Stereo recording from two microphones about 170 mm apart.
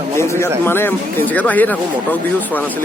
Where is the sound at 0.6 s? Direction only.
15° left (ahead or behind).